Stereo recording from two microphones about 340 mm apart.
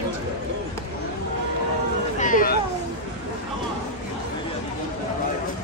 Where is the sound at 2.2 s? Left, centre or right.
Left.